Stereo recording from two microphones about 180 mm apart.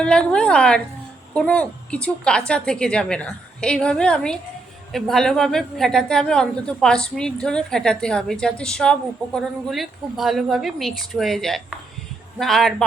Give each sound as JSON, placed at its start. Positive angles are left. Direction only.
{"t": 0.0, "sound": "a woman's voice", "side_deg": 5}